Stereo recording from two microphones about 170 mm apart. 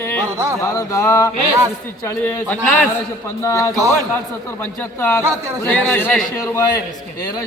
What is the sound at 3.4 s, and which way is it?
Speech, 20° left (ahead or behind).